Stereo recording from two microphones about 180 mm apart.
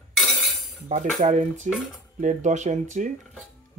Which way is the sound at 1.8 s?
45° right (ahead or behind).